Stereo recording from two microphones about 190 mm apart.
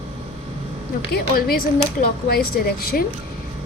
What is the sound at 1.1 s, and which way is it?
A woman's voice, 50° left (ahead or behind).